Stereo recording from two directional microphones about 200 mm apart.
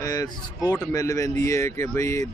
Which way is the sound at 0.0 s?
15° left (ahead or behind).